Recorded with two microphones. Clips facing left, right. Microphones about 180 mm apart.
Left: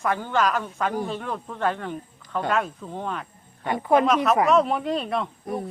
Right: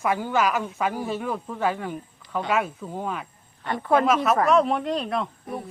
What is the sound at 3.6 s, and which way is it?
Speech, 15° left (ahead or behind).